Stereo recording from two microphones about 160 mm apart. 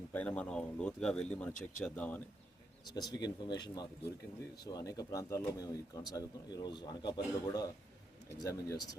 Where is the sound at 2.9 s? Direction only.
25° left (ahead or behind).